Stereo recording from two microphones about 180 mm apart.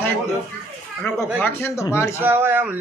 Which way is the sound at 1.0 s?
5° left (ahead or behind).